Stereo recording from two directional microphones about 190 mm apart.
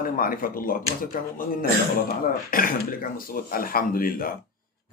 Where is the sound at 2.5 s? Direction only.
50° left (ahead or behind).